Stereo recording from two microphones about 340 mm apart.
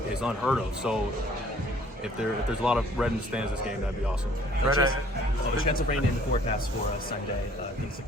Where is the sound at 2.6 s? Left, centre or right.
Centre.